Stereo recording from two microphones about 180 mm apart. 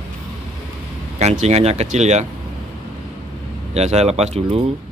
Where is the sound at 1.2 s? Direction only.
40° right (ahead or behind).